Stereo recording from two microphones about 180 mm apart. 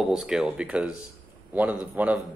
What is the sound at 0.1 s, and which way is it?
Speech, 5° right (ahead or behind).